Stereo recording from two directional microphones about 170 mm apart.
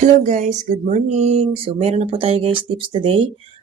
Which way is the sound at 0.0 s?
45° right (ahead or behind).